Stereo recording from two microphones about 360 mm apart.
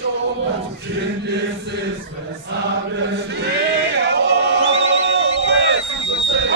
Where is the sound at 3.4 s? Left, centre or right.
Right.